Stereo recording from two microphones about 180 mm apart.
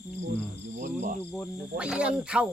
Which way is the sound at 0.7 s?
45° right (ahead or behind).